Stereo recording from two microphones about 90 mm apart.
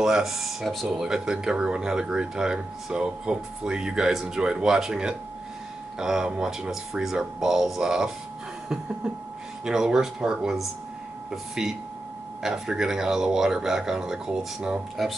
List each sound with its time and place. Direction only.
0.0 s speech: 5° right (ahead or behind)
9.7 s speech: 5° right (ahead or behind)